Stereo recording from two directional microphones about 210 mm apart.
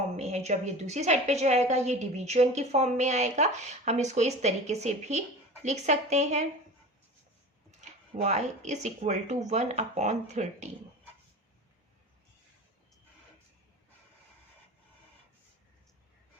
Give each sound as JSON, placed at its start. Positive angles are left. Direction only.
{"t": 0.2, "sound": "a woman's voice", "side_deg": -30}
{"t": 7.9, "sound": "a woman's voice", "side_deg": -35}